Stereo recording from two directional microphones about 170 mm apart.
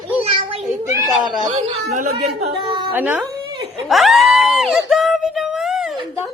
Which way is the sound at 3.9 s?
Centre (ahead or behind).